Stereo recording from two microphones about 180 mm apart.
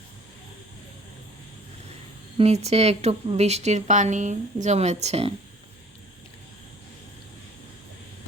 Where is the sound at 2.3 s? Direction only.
35° right (ahead or behind).